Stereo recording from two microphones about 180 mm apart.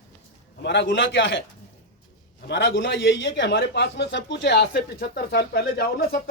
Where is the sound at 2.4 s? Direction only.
75° left (ahead or behind).